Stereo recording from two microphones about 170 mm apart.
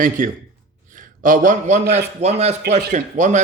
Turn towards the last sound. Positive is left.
turn(degrees=-45)  # may be behind; listen again after turning